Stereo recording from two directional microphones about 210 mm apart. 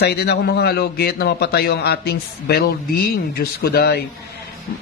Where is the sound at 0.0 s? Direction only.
50° left (ahead or behind).